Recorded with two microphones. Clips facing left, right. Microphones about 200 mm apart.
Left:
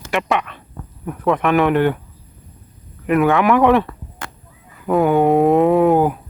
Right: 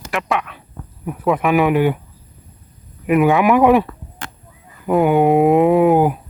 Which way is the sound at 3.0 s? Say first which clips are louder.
Right 1 dB; 5° right (ahead or behind).